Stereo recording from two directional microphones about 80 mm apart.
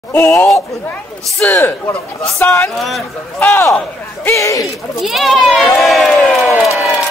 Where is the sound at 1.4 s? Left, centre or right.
Centre.